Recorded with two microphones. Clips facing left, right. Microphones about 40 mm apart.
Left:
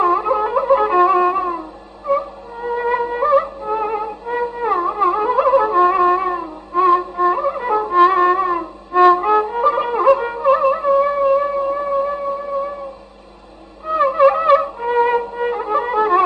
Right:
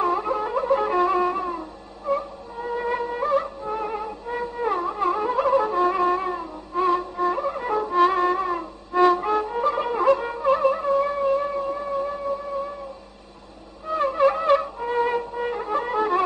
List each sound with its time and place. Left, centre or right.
0.0 s music: centre
14.0 s wind instrument: centre
14.6 s music: left